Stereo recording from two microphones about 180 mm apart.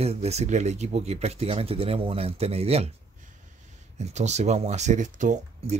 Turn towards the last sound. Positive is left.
turn(degrees=-45)  # may be behind; listen again after turning